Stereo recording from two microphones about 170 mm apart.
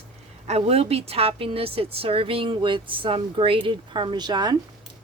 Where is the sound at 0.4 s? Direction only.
40° right (ahead or behind).